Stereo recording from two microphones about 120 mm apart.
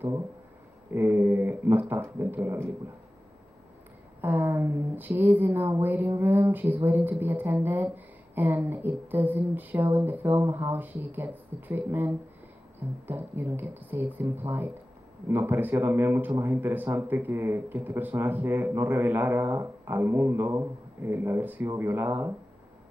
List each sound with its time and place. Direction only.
0.9 s speech: 15° right (ahead or behind)
4.2 s speech: 20° right (ahead or behind)